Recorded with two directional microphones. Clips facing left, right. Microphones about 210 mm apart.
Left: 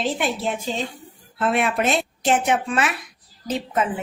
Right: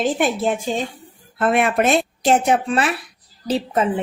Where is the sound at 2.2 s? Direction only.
35° right (ahead or behind).